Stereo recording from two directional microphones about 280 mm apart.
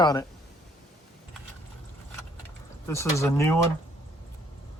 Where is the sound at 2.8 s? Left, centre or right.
Centre.